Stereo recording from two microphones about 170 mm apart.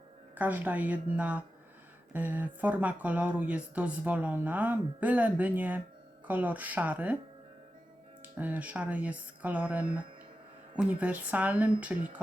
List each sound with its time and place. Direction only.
0.3 s speech: 10° right (ahead or behind)
8.2 s speech: 10° right (ahead or behind)